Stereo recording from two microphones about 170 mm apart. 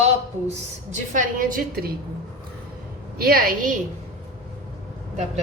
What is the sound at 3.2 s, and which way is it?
Speech, 60° right (ahead or behind).